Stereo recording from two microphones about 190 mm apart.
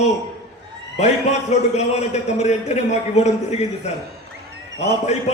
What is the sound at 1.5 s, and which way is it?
A man's voice, 35° left (ahead or behind).